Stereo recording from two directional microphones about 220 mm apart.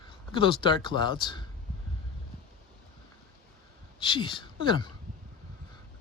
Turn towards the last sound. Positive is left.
turn(degrees=20)  # may be behind; listen again after turning